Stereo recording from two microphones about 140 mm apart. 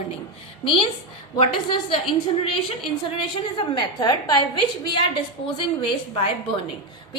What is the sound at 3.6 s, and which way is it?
Speech, 30° left (ahead or behind).